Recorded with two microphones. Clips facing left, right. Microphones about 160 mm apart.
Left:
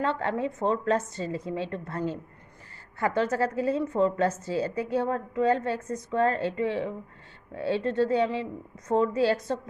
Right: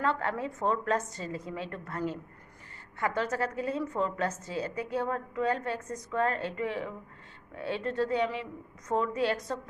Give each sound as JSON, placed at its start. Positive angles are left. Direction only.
{"t": 0.0, "sound": "a woman's voice", "side_deg": 25}